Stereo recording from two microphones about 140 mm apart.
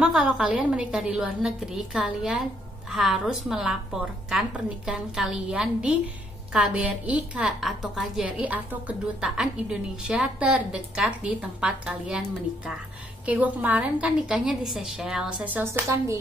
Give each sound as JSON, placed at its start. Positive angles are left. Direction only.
{"t": 0.0, "sound": "a woman's voice", "side_deg": -5}